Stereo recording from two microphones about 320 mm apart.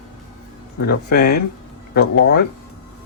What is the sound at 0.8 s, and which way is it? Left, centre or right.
Speech, left.